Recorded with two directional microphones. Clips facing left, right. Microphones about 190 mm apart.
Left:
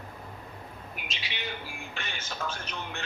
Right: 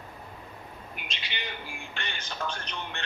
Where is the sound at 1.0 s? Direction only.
Centre (ahead or behind).